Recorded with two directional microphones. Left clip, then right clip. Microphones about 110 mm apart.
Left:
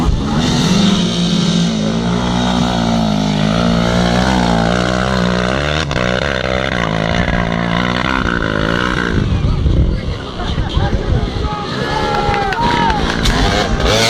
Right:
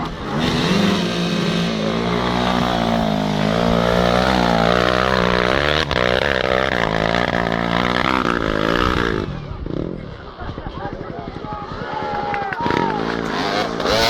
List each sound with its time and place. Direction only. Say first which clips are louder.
0.3 s vehicle: left 2 dB; 45° right (ahead or behind)
4.7 s a sound: even; 30° right (ahead or behind); by 9.0 s 55° right (ahead or behind)
11.9 s run: left 6 dB; 50° left (ahead or behind)
12.9 s music: left 6 dB; 40° left (ahead or behind)
13.8 s vehicle: left 3 dB; 10° left (ahead or behind)